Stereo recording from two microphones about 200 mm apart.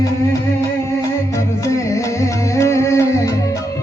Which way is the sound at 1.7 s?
15° left (ahead or behind).